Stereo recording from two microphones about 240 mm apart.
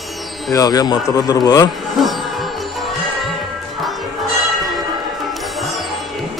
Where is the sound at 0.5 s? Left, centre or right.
Centre.